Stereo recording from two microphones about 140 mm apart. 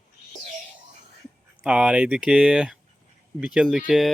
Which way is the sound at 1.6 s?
5° right (ahead or behind).